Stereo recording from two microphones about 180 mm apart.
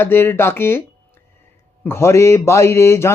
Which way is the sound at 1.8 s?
15° left (ahead or behind).